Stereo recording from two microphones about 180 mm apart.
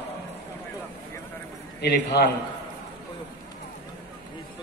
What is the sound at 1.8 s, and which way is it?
Speech, 70° left (ahead or behind).